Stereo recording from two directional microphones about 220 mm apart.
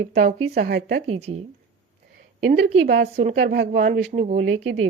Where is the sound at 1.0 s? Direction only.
30° right (ahead or behind).